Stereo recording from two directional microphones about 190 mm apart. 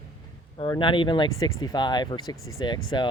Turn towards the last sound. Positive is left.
turn(degrees=25)  # may be behind; listen again after turning